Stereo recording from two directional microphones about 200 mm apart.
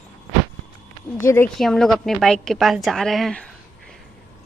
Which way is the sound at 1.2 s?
15° left (ahead or behind).